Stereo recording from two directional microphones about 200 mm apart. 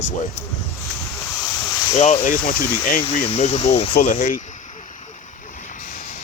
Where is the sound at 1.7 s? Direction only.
15° left (ahead or behind).